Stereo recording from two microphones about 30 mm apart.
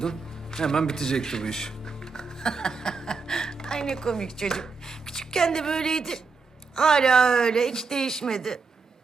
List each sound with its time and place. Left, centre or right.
0.0 s a woman's voice: centre